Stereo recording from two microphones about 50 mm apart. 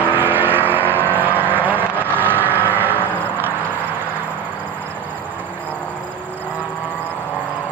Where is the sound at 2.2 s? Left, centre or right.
Right.